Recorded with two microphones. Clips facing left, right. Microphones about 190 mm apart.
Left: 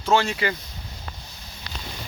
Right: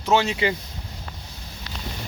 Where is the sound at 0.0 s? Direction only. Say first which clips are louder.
Right 1 dB; 15° right (ahead or behind).